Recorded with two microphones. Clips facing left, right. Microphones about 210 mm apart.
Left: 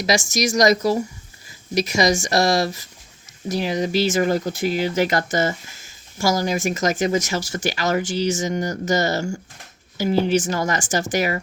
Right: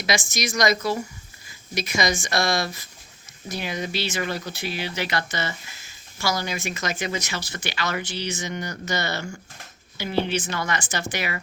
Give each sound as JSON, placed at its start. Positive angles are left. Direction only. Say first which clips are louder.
{"t": 0.0, "sound": "speech", "louder": "left 6 dB", "side_deg": 40}